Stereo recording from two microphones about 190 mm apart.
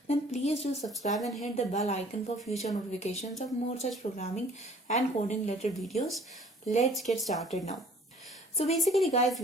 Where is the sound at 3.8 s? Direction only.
35° left (ahead or behind).